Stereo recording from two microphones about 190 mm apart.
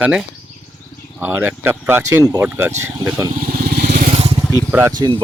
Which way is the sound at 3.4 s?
50° right (ahead or behind).